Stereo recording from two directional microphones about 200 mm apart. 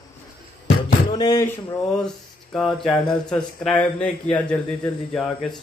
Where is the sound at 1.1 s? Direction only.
20° left (ahead or behind).